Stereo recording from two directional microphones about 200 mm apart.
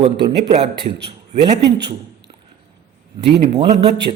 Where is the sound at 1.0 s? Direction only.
25° right (ahead or behind).